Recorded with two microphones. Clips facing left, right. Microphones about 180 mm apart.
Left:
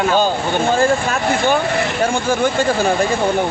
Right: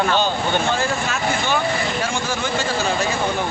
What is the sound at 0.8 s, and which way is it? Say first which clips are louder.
Speech: left 7 dB; 50° left (ahead or behind).